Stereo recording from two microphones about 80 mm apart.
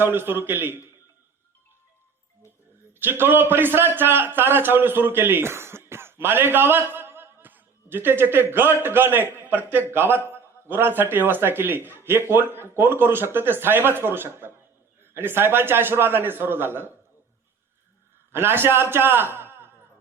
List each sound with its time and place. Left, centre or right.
0.0 s a man's voice: right
3.0 s a man's voice: right
18.3 s a man's voice: right